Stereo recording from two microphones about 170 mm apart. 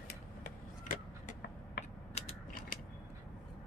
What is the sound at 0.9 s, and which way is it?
Vehicle, 65° left (ahead or behind).